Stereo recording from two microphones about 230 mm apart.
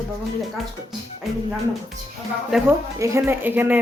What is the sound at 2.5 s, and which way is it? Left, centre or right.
Speech, centre.